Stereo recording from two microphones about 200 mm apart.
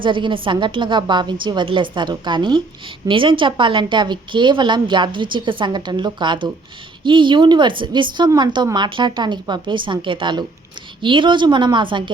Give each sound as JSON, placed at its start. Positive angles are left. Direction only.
{"t": 0.0, "sound": "a woman's voice", "side_deg": -25}